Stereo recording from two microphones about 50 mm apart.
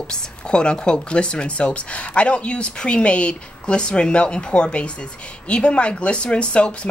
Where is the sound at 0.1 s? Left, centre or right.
Centre.